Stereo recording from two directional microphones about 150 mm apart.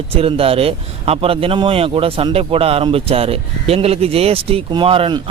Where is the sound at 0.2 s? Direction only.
40° right (ahead or behind).